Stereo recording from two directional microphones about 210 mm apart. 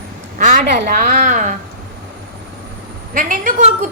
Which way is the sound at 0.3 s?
40° right (ahead or behind).